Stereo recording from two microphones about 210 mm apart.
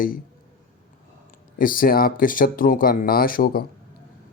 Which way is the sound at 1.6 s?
40° left (ahead or behind).